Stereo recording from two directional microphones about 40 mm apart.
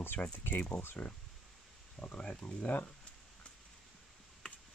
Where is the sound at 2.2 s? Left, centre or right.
Left.